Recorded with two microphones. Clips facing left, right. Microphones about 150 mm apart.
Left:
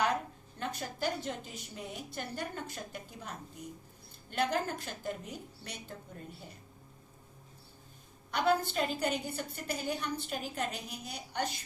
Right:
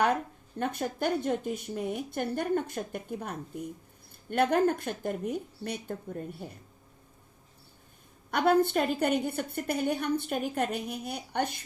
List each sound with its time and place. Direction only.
0.6 s a woman's voice: 55° right (ahead or behind)
8.3 s a woman's voice: 60° right (ahead or behind)